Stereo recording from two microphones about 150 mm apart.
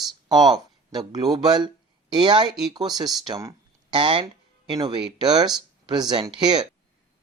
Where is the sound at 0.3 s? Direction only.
25° right (ahead or behind).